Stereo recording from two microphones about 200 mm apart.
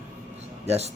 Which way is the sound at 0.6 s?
35° right (ahead or behind).